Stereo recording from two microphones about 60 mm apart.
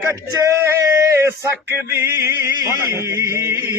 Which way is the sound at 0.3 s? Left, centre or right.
Right.